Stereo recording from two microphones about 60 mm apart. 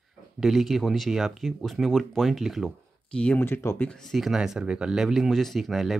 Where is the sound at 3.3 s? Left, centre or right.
Left.